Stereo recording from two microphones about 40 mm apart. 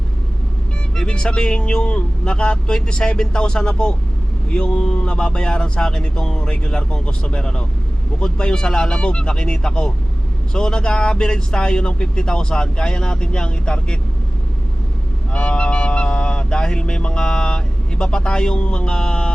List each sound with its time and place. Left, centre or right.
0.9 s honk: left
15.3 s honk: left